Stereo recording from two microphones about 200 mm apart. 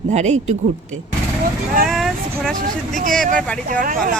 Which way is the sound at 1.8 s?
Centre (ahead or behind).